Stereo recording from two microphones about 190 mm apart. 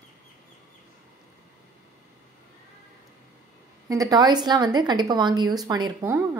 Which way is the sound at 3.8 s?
20° right (ahead or behind).